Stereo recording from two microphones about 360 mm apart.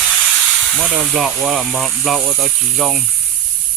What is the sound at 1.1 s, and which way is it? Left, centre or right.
Speech, centre.